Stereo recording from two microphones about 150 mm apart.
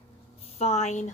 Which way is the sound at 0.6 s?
45° left (ahead or behind).